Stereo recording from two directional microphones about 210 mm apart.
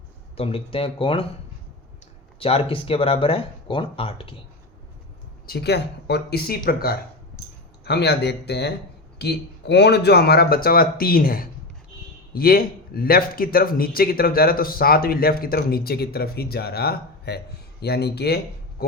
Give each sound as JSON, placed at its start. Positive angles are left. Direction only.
{"t": 0.3, "sound": "speech", "side_deg": 25}
{"t": 2.4, "sound": "speech", "side_deg": 25}
{"t": 5.5, "sound": "a man's voice", "side_deg": 50}
{"t": 18.8, "sound": "a sound", "side_deg": 45}